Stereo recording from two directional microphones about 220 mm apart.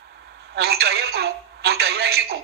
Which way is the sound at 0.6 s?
45° right (ahead or behind).